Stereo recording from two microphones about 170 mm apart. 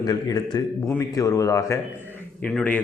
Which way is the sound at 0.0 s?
20° left (ahead or behind).